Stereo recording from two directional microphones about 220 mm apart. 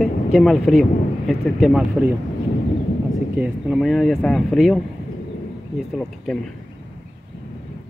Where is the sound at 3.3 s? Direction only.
5° right (ahead or behind).